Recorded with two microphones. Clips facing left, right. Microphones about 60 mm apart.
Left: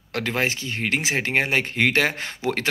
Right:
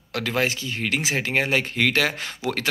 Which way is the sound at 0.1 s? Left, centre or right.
Left.